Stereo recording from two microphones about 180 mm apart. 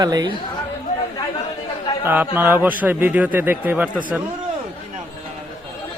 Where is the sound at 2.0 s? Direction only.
10° right (ahead or behind).